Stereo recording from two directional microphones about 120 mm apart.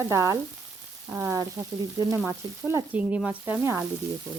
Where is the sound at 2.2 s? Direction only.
10° right (ahead or behind).